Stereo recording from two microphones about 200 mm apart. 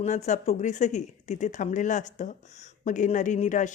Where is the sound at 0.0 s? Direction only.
35° left (ahead or behind).